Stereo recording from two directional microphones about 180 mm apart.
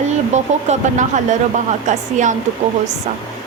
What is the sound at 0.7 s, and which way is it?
Speech, 40° right (ahead or behind).